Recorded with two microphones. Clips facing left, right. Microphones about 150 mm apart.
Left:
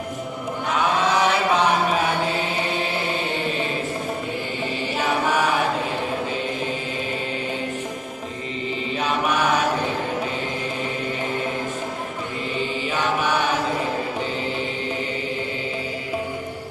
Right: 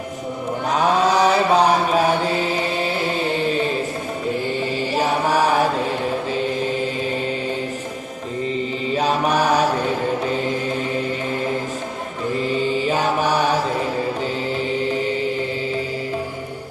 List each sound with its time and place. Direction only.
0.7 s mantra: 35° right (ahead or behind)
9.0 s mantra: 35° right (ahead or behind)